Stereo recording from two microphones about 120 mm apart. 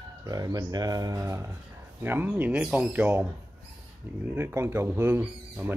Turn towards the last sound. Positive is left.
turn(degrees=-15)  # may be behind; listen again after turning